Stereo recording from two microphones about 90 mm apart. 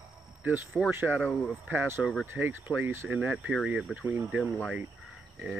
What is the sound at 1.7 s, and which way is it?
Speech, 25° right (ahead or behind).